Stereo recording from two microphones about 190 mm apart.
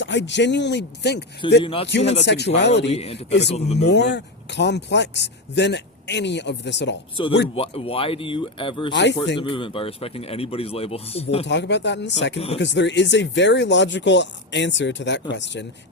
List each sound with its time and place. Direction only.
0.0 s speech: 70° left (ahead or behind)
1.6 s speech: 30° left (ahead or behind)
2.2 s speech: 65° left (ahead or behind)
2.8 s speech: 30° left (ahead or behind)
3.8 s speech: 60° left (ahead or behind)
7.2 s speech: 25° left (ahead or behind)
8.9 s speech: 65° left (ahead or behind)
9.4 s speech: 25° left (ahead or behind)
11.4 s speech: 65° left (ahead or behind)